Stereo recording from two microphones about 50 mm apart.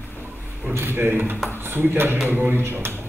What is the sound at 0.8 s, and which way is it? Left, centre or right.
Speech, right.